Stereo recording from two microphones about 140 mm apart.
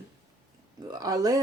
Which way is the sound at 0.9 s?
25° right (ahead or behind).